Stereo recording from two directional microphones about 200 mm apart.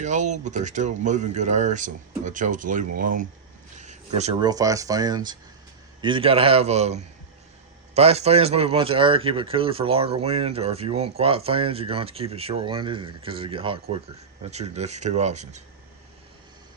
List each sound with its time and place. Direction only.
0.0 s speech: 35° right (ahead or behind)
3.8 s a sound: 35° right (ahead or behind)
4.4 s speech: 20° right (ahead or behind); by 15.6 s 35° right (ahead or behind)